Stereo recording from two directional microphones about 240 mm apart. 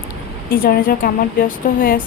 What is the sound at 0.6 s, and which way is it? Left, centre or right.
A woman's voice, left.